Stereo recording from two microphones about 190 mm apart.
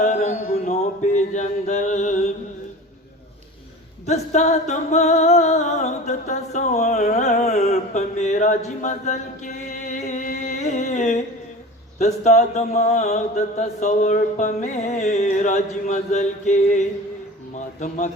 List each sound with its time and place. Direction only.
0.0 s music: 35° left (ahead or behind)
4.0 s music: 35° left (ahead or behind)
11.9 s mantra: 40° left (ahead or behind)